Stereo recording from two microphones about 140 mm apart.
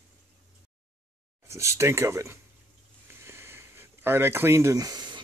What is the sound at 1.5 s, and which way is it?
Speech, 20° right (ahead or behind).